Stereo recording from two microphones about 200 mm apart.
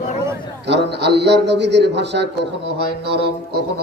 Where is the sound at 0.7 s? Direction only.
60° right (ahead or behind).